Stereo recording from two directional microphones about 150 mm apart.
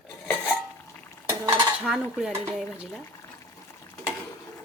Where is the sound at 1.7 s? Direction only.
5° right (ahead or behind).